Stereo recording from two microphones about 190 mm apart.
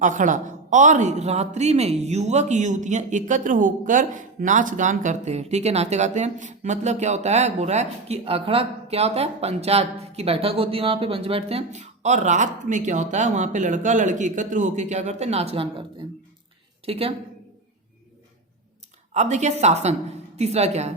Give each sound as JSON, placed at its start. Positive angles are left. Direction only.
{"t": 0.0, "sound": "speech", "side_deg": -40}
{"t": 16.8, "sound": "speech", "side_deg": -30}
{"t": 19.1, "sound": "speech", "side_deg": -35}